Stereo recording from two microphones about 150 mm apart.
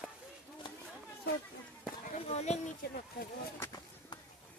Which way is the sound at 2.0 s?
45° left (ahead or behind).